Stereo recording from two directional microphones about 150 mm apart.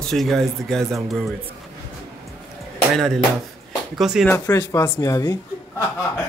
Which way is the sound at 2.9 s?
Centre (ahead or behind).